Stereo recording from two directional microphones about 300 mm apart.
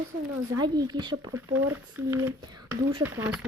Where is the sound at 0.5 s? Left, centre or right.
Centre.